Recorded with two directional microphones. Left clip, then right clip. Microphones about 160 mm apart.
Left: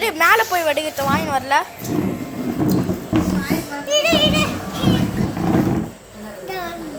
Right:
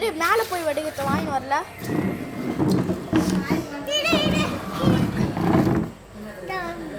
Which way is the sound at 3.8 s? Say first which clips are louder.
Left 6 dB; 20° left (ahead or behind).